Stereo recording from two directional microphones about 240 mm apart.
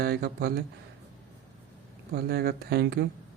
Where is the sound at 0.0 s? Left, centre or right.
Right.